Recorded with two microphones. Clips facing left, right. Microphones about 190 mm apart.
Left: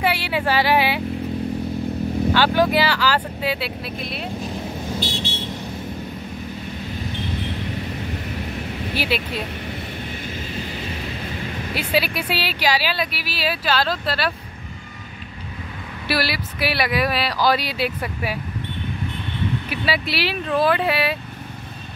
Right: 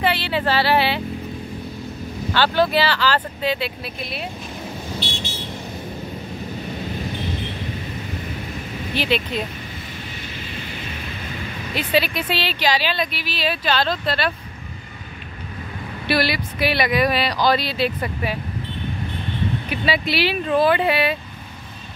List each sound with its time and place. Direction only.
0.0 s speech: 10° left (ahead or behind)
2.3 s speech: 10° left (ahead or behind)
5.0 s vehicle: 35° left (ahead or behind)
8.9 s speech: 5° left (ahead or behind)
11.7 s speech: 10° left (ahead or behind)
16.1 s speech: 5° left (ahead or behind)
19.7 s speech: 5° left (ahead or behind)